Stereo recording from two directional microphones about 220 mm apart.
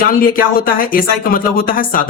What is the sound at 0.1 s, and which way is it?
Speech, 40° left (ahead or behind).